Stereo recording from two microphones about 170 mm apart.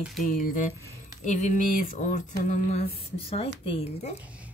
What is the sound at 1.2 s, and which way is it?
A woman's voice, 45° left (ahead or behind).